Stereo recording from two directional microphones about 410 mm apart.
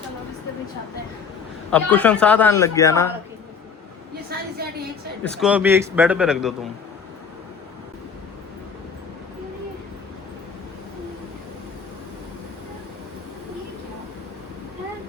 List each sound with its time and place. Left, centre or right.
1.7 s speech: centre
4.3 s a sound: right
5.2 s speech: centre